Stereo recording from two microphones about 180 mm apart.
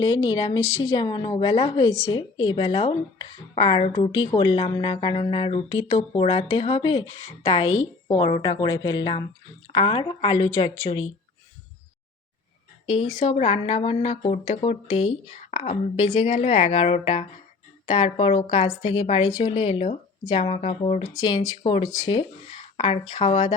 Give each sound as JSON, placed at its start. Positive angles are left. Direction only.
{"t": 0.0, "sound": "speech", "side_deg": 25}
{"t": 12.8, "sound": "speech", "side_deg": 30}
{"t": 21.2, "sound": "speech", "side_deg": 25}